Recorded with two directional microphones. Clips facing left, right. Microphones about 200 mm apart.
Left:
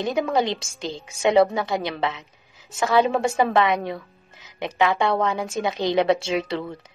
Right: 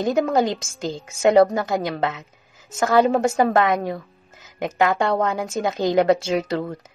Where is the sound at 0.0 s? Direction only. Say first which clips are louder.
Right 3 dB; 45° right (ahead or behind).